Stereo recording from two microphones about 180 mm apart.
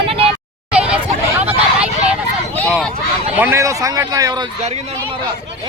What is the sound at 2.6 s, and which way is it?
Speech, 5° left (ahead or behind).